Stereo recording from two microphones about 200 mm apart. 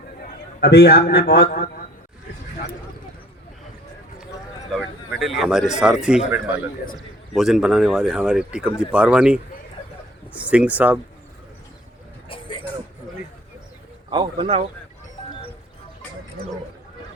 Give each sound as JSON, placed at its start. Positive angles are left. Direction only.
{"t": 0.6, "sound": "a man's voice", "side_deg": 50}
{"t": 4.7, "sound": "speech", "side_deg": 0}
{"t": 12.3, "sound": "vehicle", "side_deg": 25}
{"t": 14.1, "sound": "speech", "side_deg": -25}